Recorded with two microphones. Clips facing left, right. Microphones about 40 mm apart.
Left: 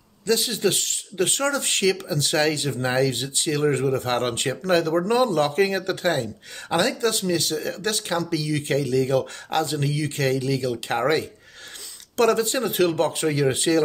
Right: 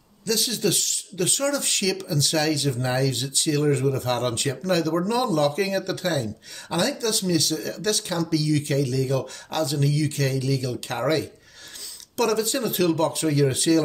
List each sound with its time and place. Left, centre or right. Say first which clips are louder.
0.2 s speech: left 3 dB; left